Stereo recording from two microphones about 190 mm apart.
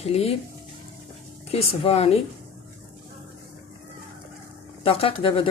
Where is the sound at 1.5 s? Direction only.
30° left (ahead or behind).